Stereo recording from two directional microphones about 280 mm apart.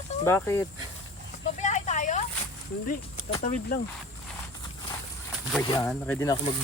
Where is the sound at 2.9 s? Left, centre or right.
Left.